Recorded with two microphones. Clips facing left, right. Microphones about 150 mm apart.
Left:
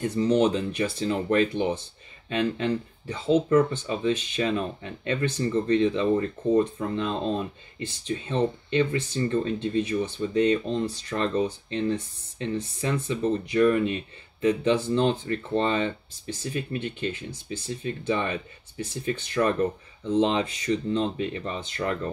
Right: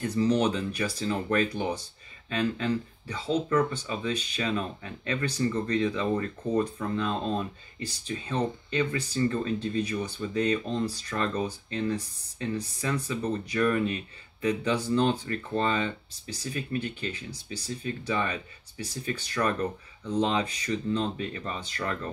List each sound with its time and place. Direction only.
0.0 s speech: 25° left (ahead or behind)
8.9 s speech: 25° left (ahead or behind)